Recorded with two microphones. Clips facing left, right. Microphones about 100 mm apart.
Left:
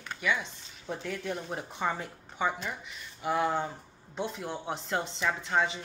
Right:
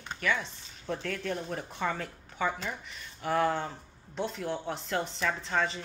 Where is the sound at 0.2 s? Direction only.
15° left (ahead or behind).